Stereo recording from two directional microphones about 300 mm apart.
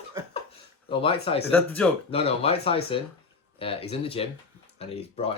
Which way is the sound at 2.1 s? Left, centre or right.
Centre.